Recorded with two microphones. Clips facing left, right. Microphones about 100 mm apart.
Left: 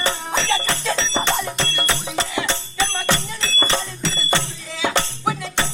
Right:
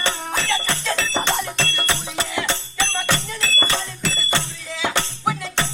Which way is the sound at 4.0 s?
30° left (ahead or behind).